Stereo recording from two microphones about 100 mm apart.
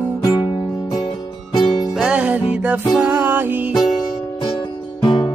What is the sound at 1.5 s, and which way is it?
Music, 45° left (ahead or behind).